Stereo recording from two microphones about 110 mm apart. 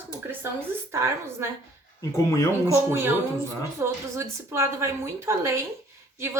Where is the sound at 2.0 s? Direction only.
30° left (ahead or behind).